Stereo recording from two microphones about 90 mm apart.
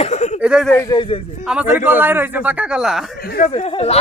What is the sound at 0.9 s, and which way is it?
Speech, 80° left.